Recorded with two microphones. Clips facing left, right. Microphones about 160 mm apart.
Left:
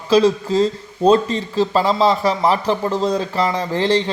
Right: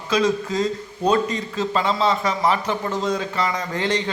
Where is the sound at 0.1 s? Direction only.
30° left (ahead or behind).